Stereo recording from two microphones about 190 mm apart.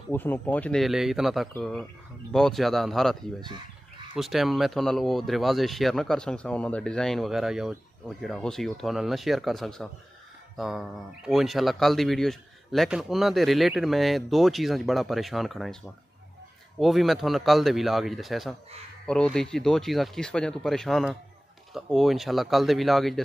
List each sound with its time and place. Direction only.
0.1 s speech: 10° left (ahead or behind)
16.8 s speech: centre (ahead or behind)